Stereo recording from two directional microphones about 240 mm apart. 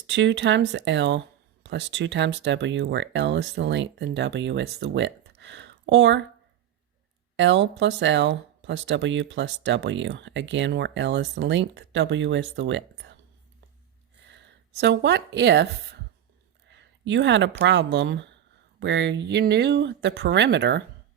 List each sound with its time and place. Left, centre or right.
0.1 s speech: right
7.3 s speech: right
14.8 s speech: right